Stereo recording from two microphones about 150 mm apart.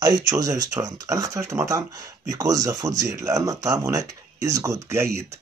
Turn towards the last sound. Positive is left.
turn(degrees=-15)  # may be behind; listen again after turning